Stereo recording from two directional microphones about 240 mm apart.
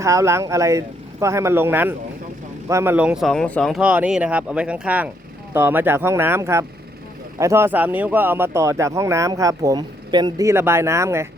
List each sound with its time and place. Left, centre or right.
0.0 s speech: centre